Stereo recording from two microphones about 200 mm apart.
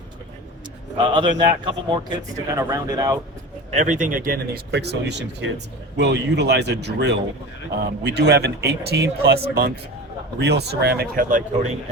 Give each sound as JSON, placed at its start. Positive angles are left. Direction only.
{"t": 0.9, "sound": "speech", "side_deg": -25}
{"t": 3.8, "sound": "speech", "side_deg": -40}
{"t": 10.4, "sound": "speech", "side_deg": -55}